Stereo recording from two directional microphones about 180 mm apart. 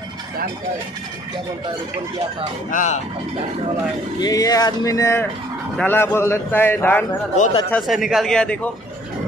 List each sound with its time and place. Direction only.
2.7 s speech: 45° left (ahead or behind)
4.2 s a man's voice: 20° left (ahead or behind)
7.7 s speech: centre (ahead or behind)